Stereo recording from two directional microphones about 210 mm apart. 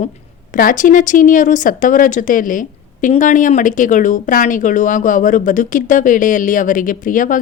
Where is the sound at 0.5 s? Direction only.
40° left (ahead or behind).